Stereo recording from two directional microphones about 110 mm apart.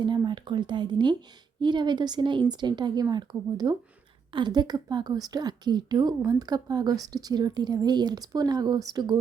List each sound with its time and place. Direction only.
0.0 s a woman's voice: 45° right (ahead or behind)